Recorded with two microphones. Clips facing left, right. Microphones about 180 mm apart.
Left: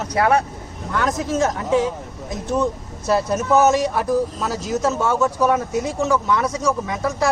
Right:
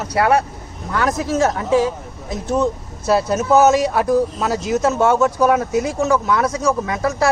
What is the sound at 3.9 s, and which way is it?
Speech, 80° right.